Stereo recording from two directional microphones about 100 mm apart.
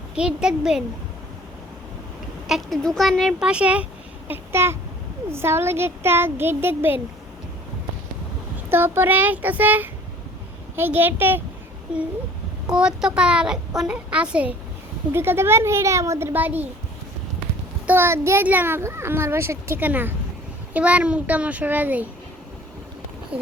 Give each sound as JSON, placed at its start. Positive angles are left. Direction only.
{"t": 0.2, "sound": "a child's voice", "side_deg": -10}
{"t": 2.5, "sound": "speech", "side_deg": 0}
{"t": 3.5, "sound": "a child's voice", "side_deg": -10}
{"t": 4.3, "sound": "babbling", "side_deg": -25}
{"t": 5.3, "sound": "speech", "side_deg": -25}
{"t": 8.5, "sound": "a child's voice", "side_deg": -20}
{"t": 15.1, "sound": "speech", "side_deg": -25}
{"t": 17.8, "sound": "a child's voice", "side_deg": -20}
{"t": 23.3, "sound": "speech", "side_deg": -10}